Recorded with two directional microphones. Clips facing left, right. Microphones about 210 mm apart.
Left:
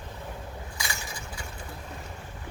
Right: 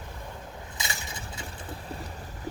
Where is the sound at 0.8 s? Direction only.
25° right (ahead or behind).